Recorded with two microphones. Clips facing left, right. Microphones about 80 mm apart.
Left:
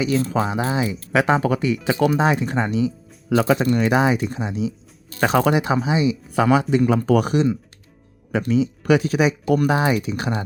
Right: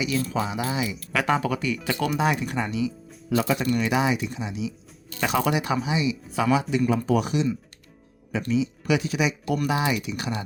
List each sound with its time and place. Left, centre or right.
0.2 s speech: left
6.3 s speech: left
6.8 s speech: left